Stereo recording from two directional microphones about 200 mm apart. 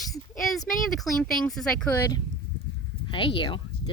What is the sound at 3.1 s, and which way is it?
Speech, 25° left (ahead or behind).